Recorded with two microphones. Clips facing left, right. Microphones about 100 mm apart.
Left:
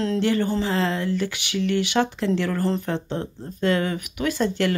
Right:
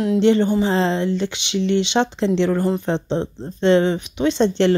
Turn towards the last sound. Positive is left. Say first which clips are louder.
# right 6 dB
turn(degrees=-25)  # may be behind; listen again after turning